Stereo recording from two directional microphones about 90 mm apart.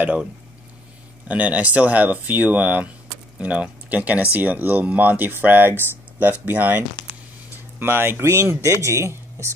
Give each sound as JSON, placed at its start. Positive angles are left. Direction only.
{"t": 0.0, "sound": "speech", "side_deg": -15}
{"t": 7.8, "sound": "speech", "side_deg": -25}